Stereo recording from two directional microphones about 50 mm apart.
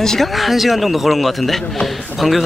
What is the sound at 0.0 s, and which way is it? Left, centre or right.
Speech, centre.